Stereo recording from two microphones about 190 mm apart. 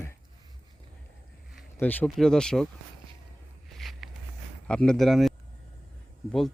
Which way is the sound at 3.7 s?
Centre (ahead or behind).